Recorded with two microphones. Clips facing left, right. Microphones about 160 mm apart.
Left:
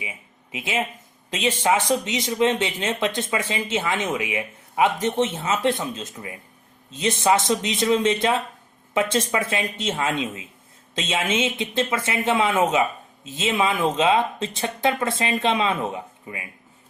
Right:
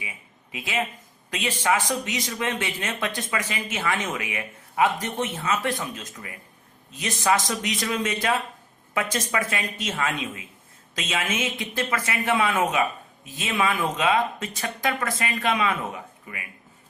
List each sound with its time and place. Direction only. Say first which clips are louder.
0.0 s speech: left 4 dB; 20° left (ahead or behind)